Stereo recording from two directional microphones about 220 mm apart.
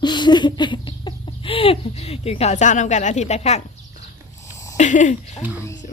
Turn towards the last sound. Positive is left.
turn(degrees=35)  # may be behind; listen again after turning